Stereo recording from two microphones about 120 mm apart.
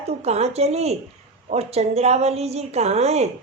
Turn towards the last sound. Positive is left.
turn(degrees=-65)  # may be behind; listen again after turning